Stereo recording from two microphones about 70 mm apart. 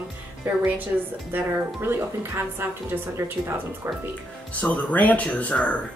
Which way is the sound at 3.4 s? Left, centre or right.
Right.